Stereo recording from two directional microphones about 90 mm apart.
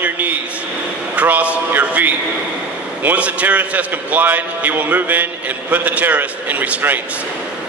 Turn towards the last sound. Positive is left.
turn(degrees=-15)  # may be behind; listen again after turning